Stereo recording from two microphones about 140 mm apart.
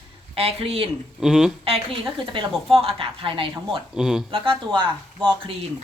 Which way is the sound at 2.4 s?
40° right (ahead or behind).